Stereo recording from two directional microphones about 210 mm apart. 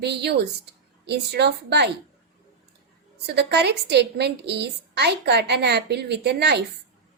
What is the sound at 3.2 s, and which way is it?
A woman's voice, 50° right (ahead or behind).